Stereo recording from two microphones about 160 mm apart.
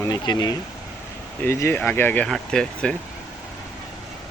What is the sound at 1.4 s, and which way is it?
Speech, 15° left (ahead or behind).